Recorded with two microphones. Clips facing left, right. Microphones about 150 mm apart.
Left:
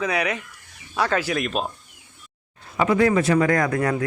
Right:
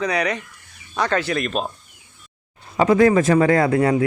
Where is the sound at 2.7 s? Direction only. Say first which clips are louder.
Right 4 dB; 40° right (ahead or behind).